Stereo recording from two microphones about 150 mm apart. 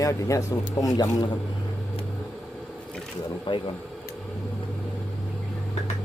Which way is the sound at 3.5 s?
30° left (ahead or behind).